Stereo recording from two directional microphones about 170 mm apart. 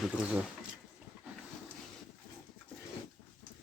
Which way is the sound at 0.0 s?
5° right (ahead or behind).